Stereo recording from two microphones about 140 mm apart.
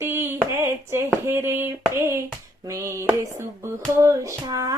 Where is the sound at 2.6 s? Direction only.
20° right (ahead or behind).